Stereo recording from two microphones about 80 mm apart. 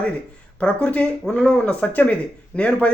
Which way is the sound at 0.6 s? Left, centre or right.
Centre.